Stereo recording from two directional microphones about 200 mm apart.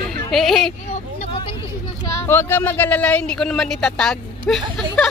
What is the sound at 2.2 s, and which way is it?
Speech, 10° left (ahead or behind).